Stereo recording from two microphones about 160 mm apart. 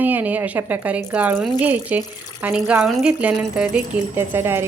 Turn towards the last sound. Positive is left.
turn(degrees=-15)  # may be behind; listen again after turning